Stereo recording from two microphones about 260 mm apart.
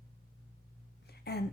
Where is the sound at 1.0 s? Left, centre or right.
Left.